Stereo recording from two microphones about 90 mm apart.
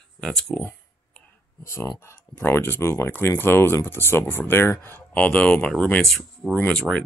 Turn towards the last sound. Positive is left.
turn(degrees=15)  # may be behind; listen again after turning